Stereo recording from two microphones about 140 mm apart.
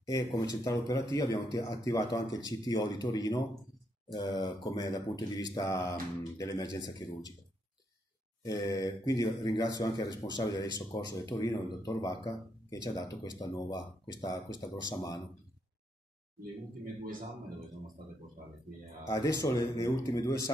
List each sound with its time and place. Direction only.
0.0 s speech: 25° left (ahead or behind)
8.5 s speech: 25° left (ahead or behind)
19.0 s speech: 25° left (ahead or behind)